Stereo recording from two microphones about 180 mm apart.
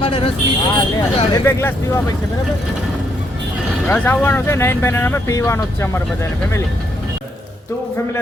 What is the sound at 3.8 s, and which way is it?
Speech, 10° left (ahead or behind).